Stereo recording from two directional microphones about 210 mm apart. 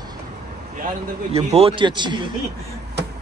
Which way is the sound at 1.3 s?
30° right (ahead or behind).